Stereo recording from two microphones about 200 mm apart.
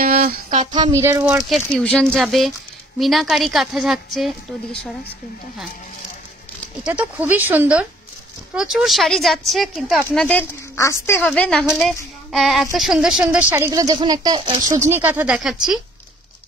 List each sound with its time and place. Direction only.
0.0 s a sound: 45° right (ahead or behind)
0.7 s speech: 15° right (ahead or behind)
1.5 s speech: 5° left (ahead or behind)
6.8 s speech: 5° right (ahead or behind)
10.8 s a woman's voice: 15° left (ahead or behind); by 15.5 s 5° right (ahead or behind)